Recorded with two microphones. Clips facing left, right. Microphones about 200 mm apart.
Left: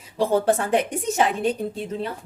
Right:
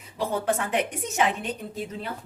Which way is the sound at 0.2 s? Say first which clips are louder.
Left 6 dB; 35° left (ahead or behind).